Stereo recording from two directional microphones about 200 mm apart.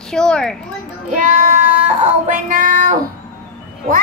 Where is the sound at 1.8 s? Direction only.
35° right (ahead or behind).